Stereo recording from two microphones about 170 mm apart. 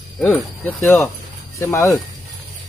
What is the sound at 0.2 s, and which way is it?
Speech, 10° left (ahead or behind).